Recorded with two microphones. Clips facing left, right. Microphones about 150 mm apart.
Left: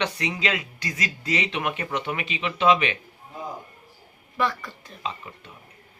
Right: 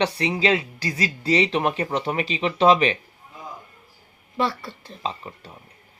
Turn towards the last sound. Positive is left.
turn(degrees=-35)  # may be behind; listen again after turning